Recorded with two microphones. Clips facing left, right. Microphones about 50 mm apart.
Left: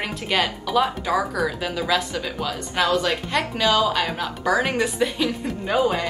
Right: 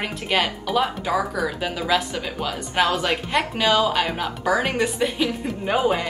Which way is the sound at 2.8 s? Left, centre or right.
Right.